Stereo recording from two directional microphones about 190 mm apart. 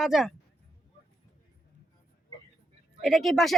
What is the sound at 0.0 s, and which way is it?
Speech, centre (ahead or behind).